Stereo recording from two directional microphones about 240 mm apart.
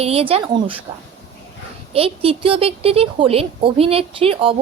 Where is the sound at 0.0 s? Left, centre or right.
Right.